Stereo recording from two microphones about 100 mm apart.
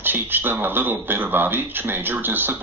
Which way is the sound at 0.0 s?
20° right (ahead or behind).